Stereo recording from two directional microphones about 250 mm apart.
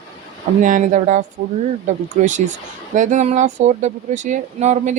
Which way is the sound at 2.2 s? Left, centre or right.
Right.